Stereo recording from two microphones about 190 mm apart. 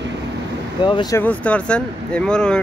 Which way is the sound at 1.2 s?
5° left (ahead or behind).